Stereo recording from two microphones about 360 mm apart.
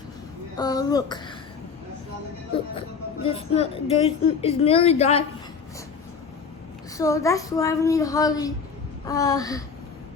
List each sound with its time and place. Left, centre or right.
0.5 s a woman's voice: centre
3.2 s a woman's voice: centre
6.9 s a woman's voice: centre